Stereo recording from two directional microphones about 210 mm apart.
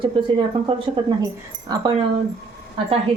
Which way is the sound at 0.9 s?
20° right (ahead or behind).